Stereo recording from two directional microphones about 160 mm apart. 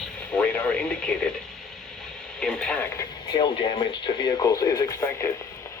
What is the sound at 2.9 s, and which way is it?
Speech, 30° left (ahead or behind).